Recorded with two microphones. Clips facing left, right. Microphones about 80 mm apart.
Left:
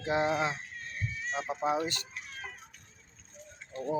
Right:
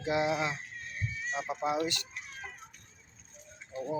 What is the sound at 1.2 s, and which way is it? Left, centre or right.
Speech, centre.